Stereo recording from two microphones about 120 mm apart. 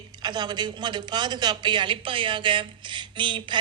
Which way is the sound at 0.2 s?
35° right (ahead or behind).